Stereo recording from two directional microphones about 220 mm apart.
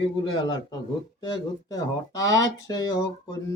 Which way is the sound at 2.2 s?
15° left (ahead or behind).